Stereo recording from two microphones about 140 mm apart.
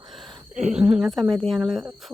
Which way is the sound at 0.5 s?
55° right (ahead or behind).